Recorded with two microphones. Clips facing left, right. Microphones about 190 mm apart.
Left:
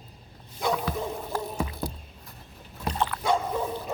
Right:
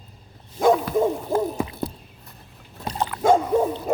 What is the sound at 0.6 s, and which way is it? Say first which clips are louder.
Bow-wow: right 10 dB; 50° right (ahead or behind).